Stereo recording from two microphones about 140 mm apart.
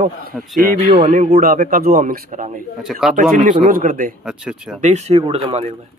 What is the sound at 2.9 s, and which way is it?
Speech, 5° right (ahead or behind).